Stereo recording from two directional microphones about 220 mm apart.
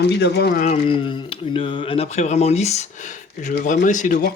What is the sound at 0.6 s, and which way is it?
Speech, 25° left (ahead or behind).